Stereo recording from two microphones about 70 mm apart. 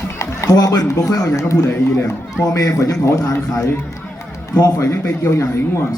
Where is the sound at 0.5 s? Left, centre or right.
Left.